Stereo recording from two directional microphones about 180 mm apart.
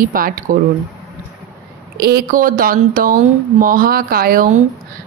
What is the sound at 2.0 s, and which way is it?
Speech, 55° right (ahead or behind).